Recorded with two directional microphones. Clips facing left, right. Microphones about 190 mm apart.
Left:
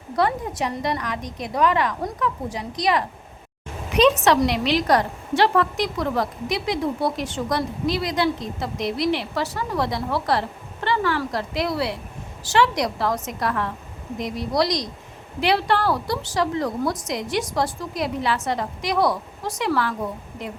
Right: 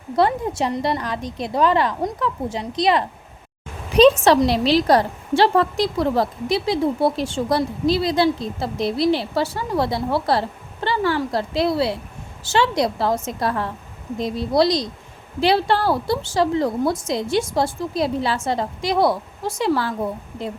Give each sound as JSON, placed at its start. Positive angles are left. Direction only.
{"t": 0.2, "sound": "a woman's voice", "side_deg": -30}